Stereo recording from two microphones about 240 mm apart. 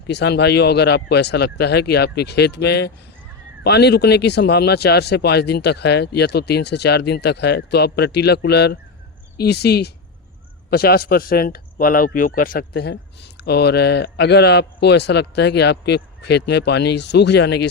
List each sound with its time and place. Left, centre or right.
0.1 s speech: left